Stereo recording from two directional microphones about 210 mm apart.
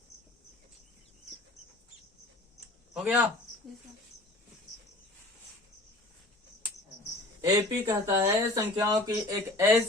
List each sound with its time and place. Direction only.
2.9 s speech: 5° right (ahead or behind)
7.4 s speech: 15° right (ahead or behind)